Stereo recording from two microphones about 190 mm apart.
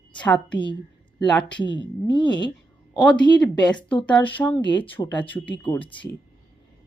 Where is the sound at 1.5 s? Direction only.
25° left (ahead or behind).